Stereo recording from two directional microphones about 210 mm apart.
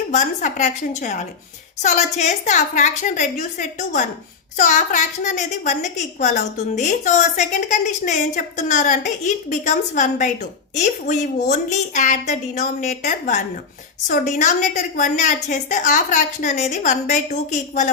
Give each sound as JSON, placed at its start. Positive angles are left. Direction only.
{"t": 0.1, "sound": "a woman's voice", "side_deg": 35}